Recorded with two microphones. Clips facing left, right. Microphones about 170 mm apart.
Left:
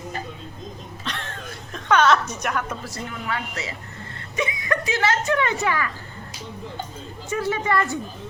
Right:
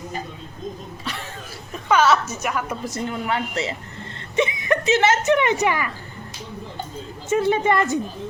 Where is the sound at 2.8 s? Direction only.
25° right (ahead or behind).